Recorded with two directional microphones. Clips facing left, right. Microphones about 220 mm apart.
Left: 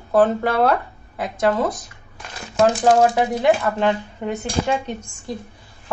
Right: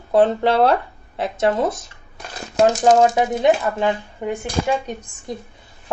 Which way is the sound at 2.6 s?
45° right (ahead or behind).